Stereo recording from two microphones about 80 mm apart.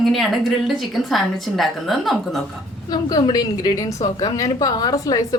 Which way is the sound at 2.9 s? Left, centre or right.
Left.